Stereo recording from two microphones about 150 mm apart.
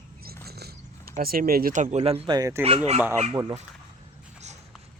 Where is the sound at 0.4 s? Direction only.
90° right.